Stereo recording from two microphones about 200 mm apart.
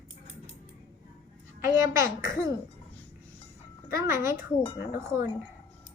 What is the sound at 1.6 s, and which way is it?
Speech, 15° right (ahead or behind).